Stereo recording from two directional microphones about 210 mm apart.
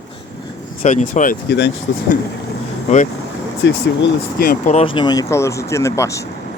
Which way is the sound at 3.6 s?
50° left (ahead or behind).